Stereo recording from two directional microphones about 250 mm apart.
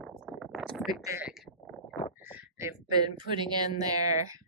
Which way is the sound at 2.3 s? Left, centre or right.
Centre.